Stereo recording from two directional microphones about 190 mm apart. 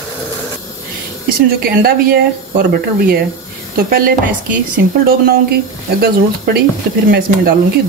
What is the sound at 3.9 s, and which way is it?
Speech, 50° right (ahead or behind).